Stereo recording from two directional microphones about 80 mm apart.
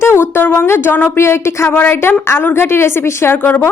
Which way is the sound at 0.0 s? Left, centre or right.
Left.